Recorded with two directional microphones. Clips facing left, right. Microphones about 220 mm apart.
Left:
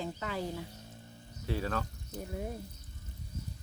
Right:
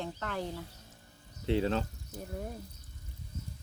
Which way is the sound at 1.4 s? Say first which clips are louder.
Right 5 dB; 25° right (ahead or behind).